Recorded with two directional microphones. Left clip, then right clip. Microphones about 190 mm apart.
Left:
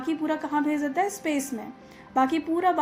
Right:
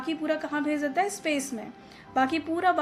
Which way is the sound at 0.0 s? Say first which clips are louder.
Left 1 dB; 35° right (ahead or behind).